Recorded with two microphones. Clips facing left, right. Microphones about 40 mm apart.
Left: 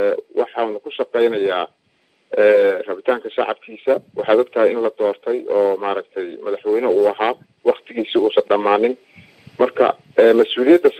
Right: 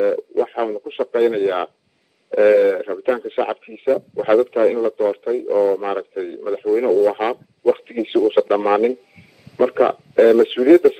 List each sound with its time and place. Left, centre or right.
0.0 s radio: left
2.3 s a man's voice: left